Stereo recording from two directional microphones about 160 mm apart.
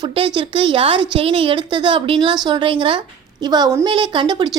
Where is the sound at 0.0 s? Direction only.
35° right (ahead or behind).